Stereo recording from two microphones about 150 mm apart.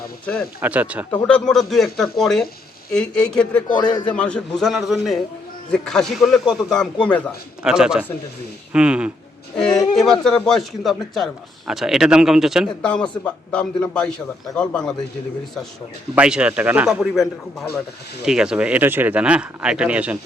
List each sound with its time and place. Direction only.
0.6 s speech: 10° right (ahead or behind)
1.1 s a man's voice: 10° left (ahead or behind)
3.8 s a man's voice: 30° left (ahead or behind)
4.0 s speech: 5° left (ahead or behind)
9.6 s a man's voice: 5° left (ahead or behind)
16.1 s speech: 5° right (ahead or behind)